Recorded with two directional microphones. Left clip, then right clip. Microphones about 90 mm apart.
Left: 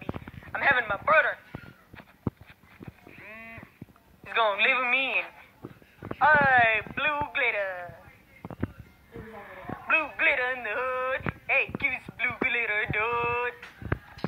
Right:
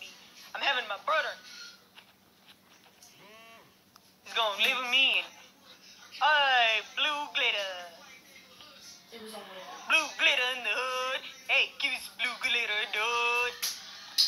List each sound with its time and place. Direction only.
0.5 s speech: 30° left (ahead or behind)
4.3 s speech: 35° left (ahead or behind)
9.6 s speech: 30° left (ahead or behind)